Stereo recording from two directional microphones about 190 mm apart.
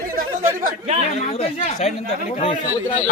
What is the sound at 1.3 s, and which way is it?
Speech, 30° left (ahead or behind).